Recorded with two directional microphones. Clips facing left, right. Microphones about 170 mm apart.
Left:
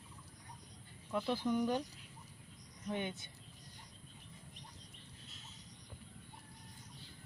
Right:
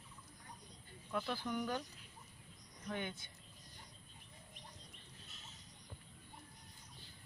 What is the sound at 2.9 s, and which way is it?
Speech, 20° left (ahead or behind).